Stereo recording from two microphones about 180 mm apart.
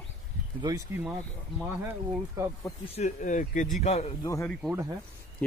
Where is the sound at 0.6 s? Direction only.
20° right (ahead or behind).